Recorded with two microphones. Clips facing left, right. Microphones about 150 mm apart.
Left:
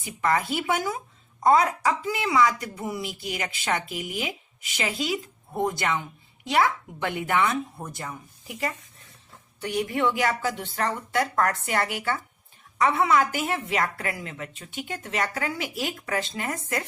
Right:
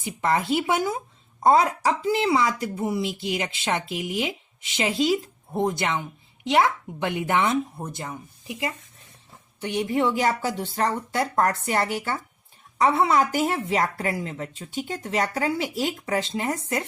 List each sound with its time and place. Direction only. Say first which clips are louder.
0.0 s a woman's voice: right 1 dB; 30° right (ahead or behind)